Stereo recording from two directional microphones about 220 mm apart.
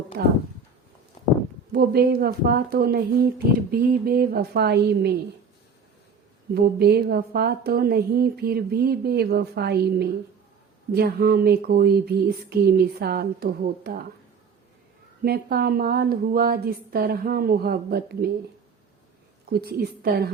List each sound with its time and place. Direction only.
0.1 s a woman's voice: 45° right (ahead or behind)
1.7 s a woman's voice: 45° right (ahead or behind)
6.5 s a woman's voice: 45° right (ahead or behind)
15.2 s a woman's voice: 45° right (ahead or behind)
19.5 s a woman's voice: 45° right (ahead or behind)